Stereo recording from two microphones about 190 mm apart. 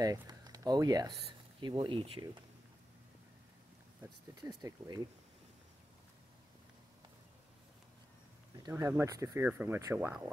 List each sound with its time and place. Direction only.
0.0 s speech: 20° right (ahead or behind)
4.4 s speech: 20° right (ahead or behind)
8.6 s speech: 15° right (ahead or behind)